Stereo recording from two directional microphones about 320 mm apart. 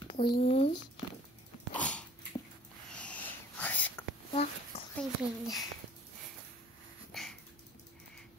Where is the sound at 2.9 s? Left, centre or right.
Centre.